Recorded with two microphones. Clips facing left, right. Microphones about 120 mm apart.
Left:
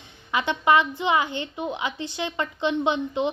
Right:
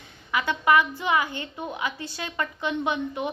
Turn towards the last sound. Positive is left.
turn(degrees=25)  # may be behind; listen again after turning